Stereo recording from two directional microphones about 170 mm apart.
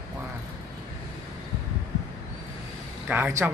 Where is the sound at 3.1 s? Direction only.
10° right (ahead or behind).